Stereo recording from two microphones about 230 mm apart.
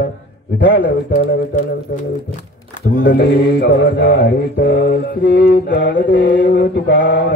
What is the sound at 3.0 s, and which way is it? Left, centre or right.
Mantra, left.